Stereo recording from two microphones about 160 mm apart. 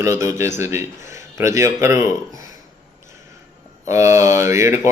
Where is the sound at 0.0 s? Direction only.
20° right (ahead or behind).